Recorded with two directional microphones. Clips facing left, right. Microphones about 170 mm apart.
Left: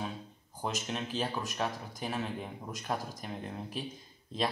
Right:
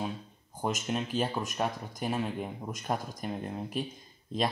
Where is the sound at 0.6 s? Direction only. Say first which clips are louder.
Right 4 dB; 15° right (ahead or behind).